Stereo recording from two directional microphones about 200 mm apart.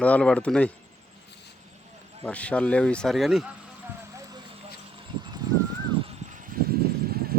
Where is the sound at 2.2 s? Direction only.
5° left (ahead or behind).